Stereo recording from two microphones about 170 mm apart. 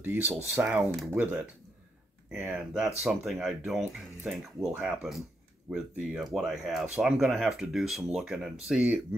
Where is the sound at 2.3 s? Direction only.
10° right (ahead or behind).